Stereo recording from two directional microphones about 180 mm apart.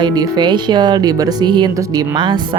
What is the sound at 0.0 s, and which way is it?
Speech, 25° right (ahead or behind).